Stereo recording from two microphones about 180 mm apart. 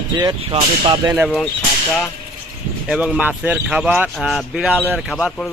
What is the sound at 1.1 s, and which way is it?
Speech, 10° right (ahead or behind).